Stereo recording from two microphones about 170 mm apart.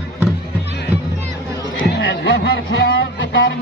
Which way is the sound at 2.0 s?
90° left.